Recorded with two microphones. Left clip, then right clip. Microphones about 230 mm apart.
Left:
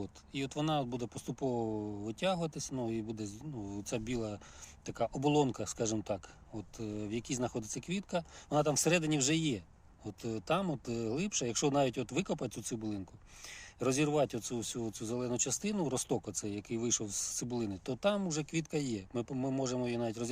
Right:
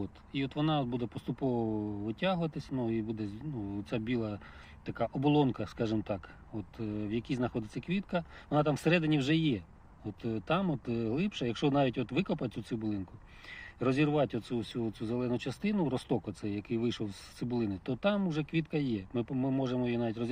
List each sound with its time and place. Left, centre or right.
0.0 s speech: centre